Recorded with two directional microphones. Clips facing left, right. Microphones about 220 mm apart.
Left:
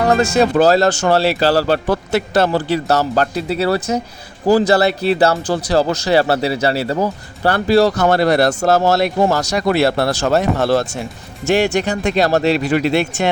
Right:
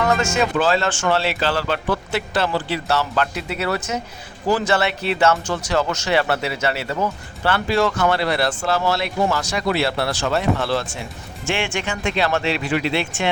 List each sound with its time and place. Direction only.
0.0 s speech: 35° left (ahead or behind)